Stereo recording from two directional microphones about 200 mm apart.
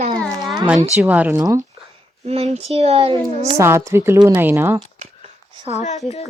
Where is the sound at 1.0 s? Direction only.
10° right (ahead or behind).